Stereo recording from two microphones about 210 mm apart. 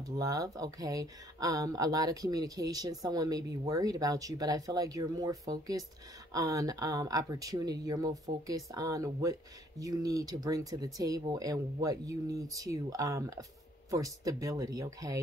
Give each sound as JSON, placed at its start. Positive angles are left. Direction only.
{"t": 0.0, "sound": "speech", "side_deg": -15}